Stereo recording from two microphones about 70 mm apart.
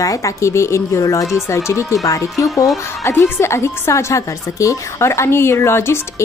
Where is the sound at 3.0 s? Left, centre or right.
Left.